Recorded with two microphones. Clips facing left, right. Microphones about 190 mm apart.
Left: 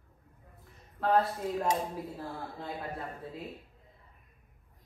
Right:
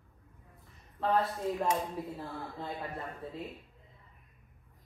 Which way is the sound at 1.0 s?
Centre (ahead or behind).